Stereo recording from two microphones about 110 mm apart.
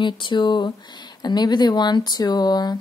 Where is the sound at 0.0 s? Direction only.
45° left (ahead or behind).